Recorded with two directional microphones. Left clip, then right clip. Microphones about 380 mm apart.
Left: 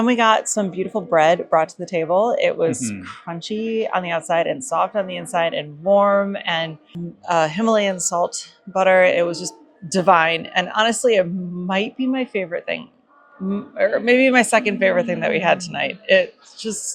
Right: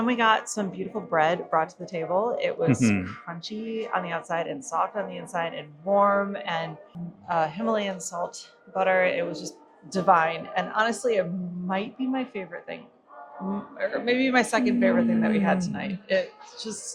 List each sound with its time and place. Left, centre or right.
0.0 s speech: centre